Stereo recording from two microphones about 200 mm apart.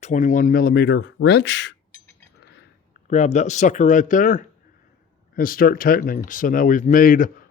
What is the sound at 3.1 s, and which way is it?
Speech, 35° left (ahead or behind).